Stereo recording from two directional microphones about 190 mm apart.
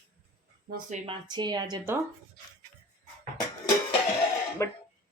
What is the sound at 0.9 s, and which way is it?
Speech, 25° right (ahead or behind).